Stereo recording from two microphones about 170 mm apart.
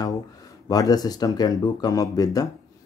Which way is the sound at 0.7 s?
20° left (ahead or behind).